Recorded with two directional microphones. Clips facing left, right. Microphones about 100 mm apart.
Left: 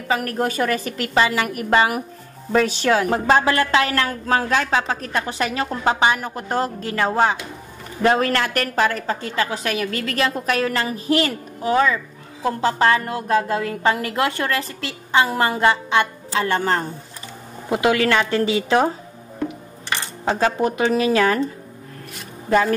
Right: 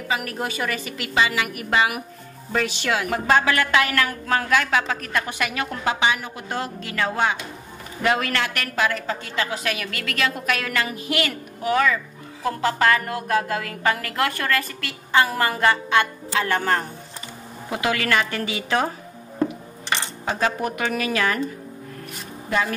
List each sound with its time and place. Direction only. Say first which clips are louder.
0.1 s a woman's voice: left 5 dB; 40° left (ahead or behind); by 18.9 s 25° left (ahead or behind)
20.3 s a woman's voice: left 4 dB; 30° left (ahead or behind)
22.5 s a woman's voice: left 6 dB; 40° left (ahead or behind)